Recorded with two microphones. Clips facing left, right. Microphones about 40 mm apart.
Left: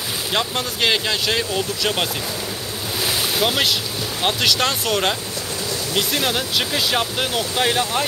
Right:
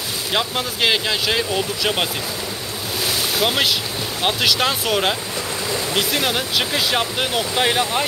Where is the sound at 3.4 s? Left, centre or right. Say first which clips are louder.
Right 1 dB; centre.